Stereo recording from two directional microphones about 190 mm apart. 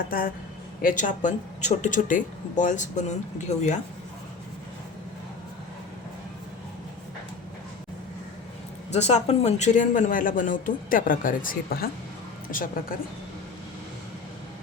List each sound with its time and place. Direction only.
0.0 s speech: 50° left (ahead or behind)
8.9 s speech: 35° left (ahead or behind)